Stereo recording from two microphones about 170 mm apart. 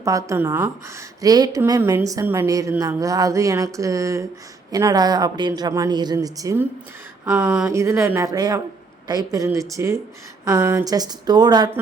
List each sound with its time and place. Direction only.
0.0 s speech: 20° right (ahead or behind)
7.3 s a woman's voice: 10° right (ahead or behind); by 11.7 s 25° right (ahead or behind)